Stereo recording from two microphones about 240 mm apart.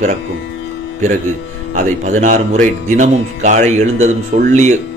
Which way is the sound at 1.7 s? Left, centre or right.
Right.